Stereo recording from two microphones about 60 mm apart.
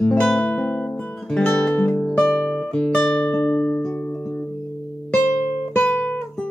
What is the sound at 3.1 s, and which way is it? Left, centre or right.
Music, left.